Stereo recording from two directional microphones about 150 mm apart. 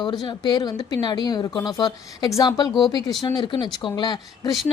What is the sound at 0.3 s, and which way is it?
A woman's voice, 30° left (ahead or behind).